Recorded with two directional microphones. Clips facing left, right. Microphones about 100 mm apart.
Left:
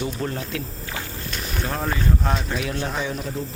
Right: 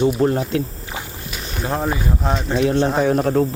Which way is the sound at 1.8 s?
10° right (ahead or behind).